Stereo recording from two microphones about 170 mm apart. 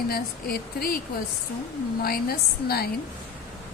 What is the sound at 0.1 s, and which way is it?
Speech, 65° left (ahead or behind).